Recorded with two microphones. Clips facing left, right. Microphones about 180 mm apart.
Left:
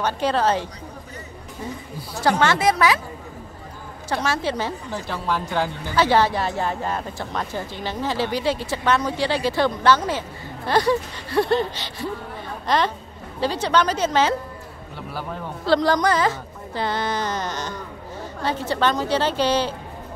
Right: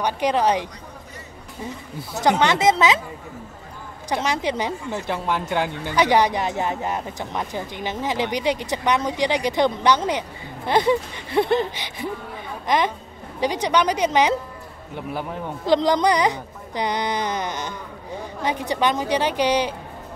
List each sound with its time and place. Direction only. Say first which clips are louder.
0.0 s speech: right 1 dB; 15° right (ahead or behind)
2.0 s speech: right 1 dB; 20° right (ahead or behind)
4.1 s a woman's voice: even; 15° right (ahead or behind)